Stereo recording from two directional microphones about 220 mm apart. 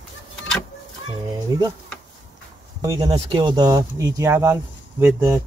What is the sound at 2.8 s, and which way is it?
Speech, 15° right (ahead or behind).